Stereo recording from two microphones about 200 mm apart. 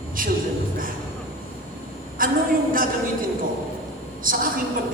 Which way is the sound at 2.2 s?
45° right (ahead or behind).